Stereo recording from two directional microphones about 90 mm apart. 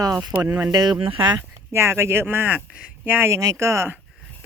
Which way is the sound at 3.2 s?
30° right (ahead or behind).